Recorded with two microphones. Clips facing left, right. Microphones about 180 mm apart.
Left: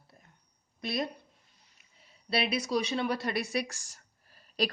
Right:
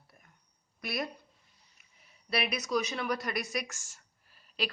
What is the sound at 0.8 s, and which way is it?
Speech, 25° left (ahead or behind).